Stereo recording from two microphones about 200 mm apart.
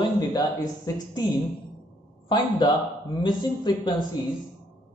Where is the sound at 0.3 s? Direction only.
20° left (ahead or behind).